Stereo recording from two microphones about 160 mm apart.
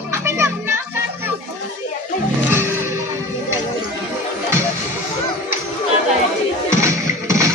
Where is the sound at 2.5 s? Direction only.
15° right (ahead or behind).